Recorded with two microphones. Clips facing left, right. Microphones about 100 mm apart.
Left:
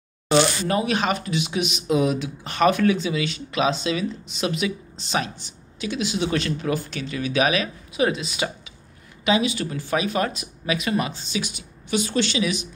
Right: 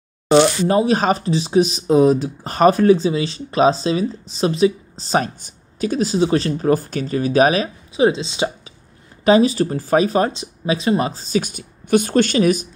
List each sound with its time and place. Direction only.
0.3 s speech: 30° right (ahead or behind)
9.2 s speech: 40° right (ahead or behind)